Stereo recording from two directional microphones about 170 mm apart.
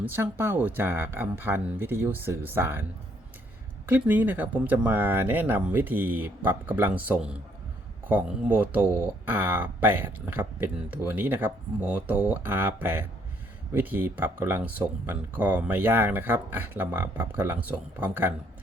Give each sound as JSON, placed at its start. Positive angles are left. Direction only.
{"t": 0.0, "sound": "speech", "side_deg": -15}
{"t": 3.8, "sound": "speech", "side_deg": -10}